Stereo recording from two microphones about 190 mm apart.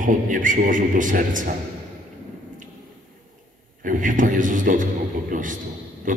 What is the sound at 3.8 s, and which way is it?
A man's voice, 45° right (ahead or behind).